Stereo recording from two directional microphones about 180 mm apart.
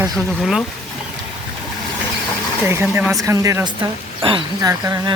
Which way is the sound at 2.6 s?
10° right (ahead or behind).